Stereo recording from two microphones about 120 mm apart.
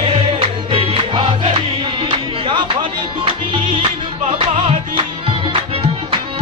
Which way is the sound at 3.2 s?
45° right (ahead or behind).